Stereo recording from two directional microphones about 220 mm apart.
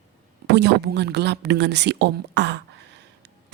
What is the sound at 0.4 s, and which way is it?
A woman's voice, 50° right (ahead or behind).